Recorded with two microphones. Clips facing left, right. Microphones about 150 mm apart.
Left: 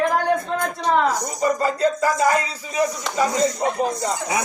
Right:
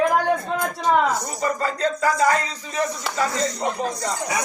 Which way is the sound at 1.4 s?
10° left (ahead or behind).